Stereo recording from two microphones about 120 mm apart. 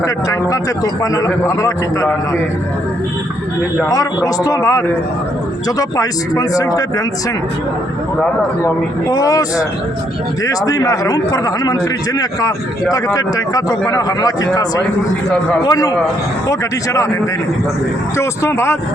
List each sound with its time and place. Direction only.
0.0 s speech: 30° left (ahead or behind)
3.8 s speech: 30° left (ahead or behind)
8.6 s a man's voice: 30° left (ahead or behind)
18.2 s speech: 20° left (ahead or behind)